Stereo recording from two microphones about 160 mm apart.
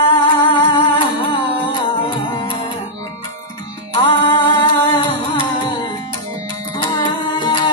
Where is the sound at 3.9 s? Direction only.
30° left (ahead or behind).